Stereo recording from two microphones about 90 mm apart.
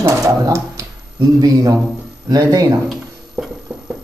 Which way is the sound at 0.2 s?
35° right (ahead or behind).